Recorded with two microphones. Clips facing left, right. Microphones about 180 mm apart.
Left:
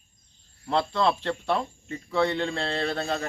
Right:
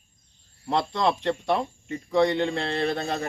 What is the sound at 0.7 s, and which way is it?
Speech, 15° right (ahead or behind).